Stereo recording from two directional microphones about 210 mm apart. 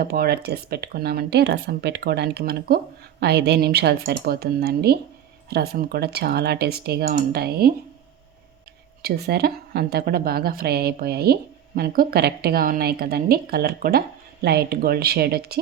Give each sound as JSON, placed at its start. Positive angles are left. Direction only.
{"t": 0.0, "sound": "a woman's voice", "side_deg": -45}
{"t": 9.0, "sound": "a woman's voice", "side_deg": -50}